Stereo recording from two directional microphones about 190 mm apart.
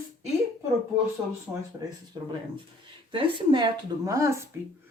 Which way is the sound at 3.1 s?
25° right (ahead or behind).